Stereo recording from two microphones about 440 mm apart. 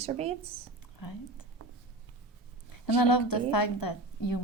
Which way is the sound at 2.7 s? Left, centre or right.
Left.